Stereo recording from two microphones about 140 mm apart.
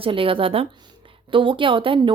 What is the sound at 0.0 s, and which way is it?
A woman's voice, 40° right (ahead or behind).